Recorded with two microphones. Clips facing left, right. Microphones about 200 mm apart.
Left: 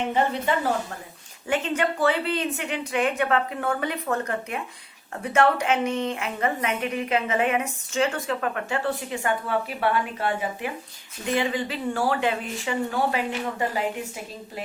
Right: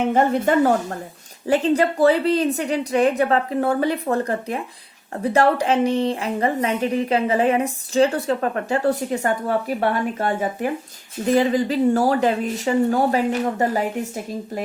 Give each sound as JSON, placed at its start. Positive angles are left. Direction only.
{"t": 0.4, "sound": "a woman's voice", "side_deg": -45}
{"t": 1.5, "sound": "a woman's voice", "side_deg": -35}